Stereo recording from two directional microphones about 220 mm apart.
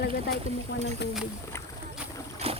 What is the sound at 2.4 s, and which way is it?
Boat, 30° right (ahead or behind).